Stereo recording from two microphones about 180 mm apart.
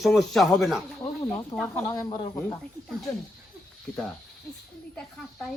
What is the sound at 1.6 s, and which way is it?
Speech, 15° left (ahead or behind).